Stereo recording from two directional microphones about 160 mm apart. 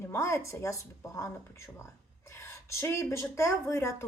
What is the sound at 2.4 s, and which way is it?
Speech, 15° left (ahead or behind).